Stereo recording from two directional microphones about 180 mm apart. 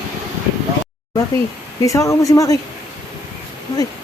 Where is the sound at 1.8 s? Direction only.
15° left (ahead or behind).